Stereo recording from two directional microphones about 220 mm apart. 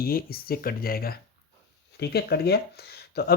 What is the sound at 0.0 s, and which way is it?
Speech, 45° left (ahead or behind).